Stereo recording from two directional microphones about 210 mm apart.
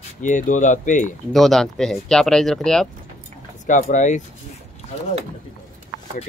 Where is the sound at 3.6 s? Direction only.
35° left (ahead or behind).